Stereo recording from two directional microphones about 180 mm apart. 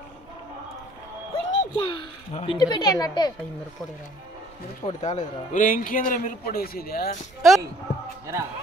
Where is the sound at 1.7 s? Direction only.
30° left (ahead or behind).